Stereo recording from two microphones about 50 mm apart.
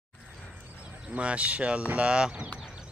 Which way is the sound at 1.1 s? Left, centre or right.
Right.